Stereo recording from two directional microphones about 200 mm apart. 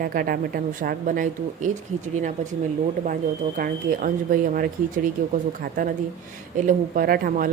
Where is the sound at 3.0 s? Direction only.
45° right (ahead or behind).